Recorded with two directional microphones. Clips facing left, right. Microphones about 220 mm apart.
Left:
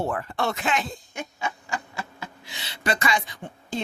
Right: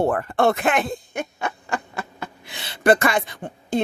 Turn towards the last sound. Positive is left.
turn(degrees=-55)  # may be behind; listen again after turning